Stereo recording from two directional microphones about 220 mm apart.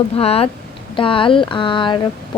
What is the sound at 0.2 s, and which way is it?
A woman's voice, 25° left (ahead or behind).